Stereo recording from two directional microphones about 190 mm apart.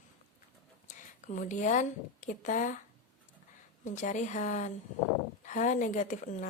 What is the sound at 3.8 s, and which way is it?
Speech, 40° left (ahead or behind).